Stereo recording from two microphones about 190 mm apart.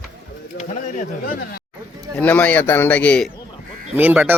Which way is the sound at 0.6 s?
40° left (ahead or behind).